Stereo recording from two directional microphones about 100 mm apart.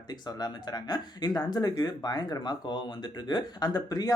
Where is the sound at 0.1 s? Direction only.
40° left (ahead or behind).